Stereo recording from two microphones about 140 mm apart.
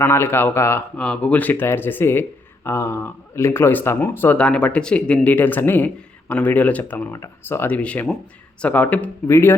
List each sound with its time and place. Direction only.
0.0 s speech: 15° left (ahead or behind)